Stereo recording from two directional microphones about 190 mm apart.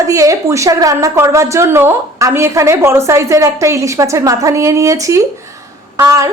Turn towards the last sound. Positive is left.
turn(degrees=-15)  # may be behind; listen again after turning